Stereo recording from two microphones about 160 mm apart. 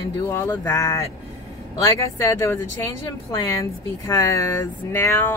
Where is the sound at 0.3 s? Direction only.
15° left (ahead or behind).